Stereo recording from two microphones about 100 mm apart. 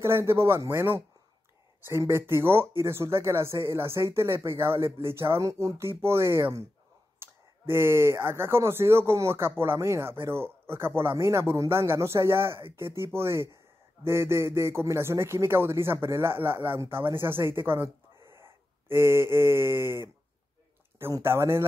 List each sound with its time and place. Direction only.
0.0 s speech: 25° right (ahead or behind)
7.2 s clicking: 20° right (ahead or behind)
7.7 s speech: 25° right (ahead or behind)
18.3 s a sound: 25° right (ahead or behind)
21.1 s speech: 25° right (ahead or behind)